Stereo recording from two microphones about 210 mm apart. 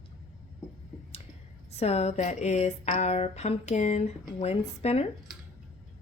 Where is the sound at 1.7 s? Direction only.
30° left (ahead or behind).